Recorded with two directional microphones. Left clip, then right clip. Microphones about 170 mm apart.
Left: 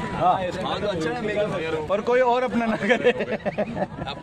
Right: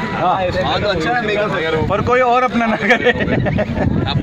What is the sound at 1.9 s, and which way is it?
Speech, 40° left (ahead or behind).